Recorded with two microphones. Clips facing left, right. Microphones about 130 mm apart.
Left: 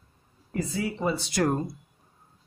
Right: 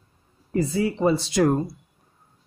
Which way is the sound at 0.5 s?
30° right (ahead or behind).